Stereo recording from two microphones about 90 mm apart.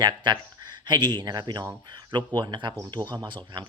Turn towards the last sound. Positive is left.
turn(degrees=-60)  # may be behind; listen again after turning